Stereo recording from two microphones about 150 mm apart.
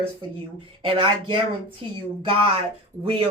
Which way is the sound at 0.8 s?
35° right (ahead or behind).